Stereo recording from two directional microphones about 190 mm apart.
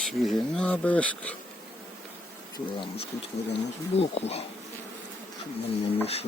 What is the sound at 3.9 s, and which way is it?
Speech, 35° left (ahead or behind).